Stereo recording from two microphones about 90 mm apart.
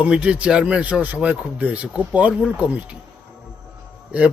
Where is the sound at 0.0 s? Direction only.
10° right (ahead or behind).